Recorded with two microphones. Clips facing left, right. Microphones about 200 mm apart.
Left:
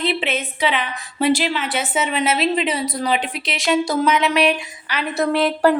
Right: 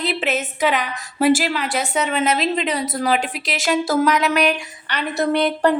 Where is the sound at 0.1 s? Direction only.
Centre (ahead or behind).